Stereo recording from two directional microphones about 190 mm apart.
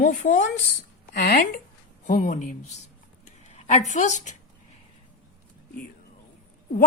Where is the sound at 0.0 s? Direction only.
40° left (ahead or behind).